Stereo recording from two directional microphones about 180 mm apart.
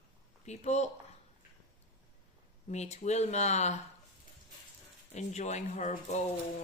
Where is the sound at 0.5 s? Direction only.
40° left (ahead or behind).